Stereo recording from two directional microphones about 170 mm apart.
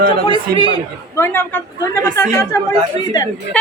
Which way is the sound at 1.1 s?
15° left (ahead or behind).